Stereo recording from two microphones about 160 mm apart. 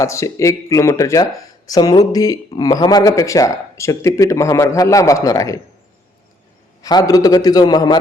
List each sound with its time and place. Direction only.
0.0 s a man's voice: 20° left (ahead or behind)
6.8 s a man's voice: 20° left (ahead or behind)